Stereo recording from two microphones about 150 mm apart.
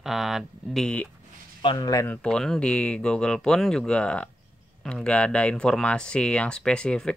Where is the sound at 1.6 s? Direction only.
25° left (ahead or behind).